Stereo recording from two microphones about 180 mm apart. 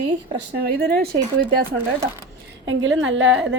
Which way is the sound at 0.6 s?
60° right (ahead or behind).